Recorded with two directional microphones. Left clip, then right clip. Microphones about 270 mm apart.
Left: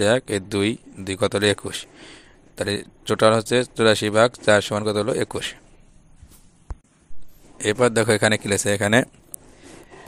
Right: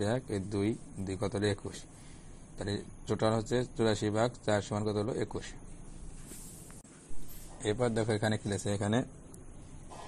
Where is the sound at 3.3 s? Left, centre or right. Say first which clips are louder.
Left 13 dB; left.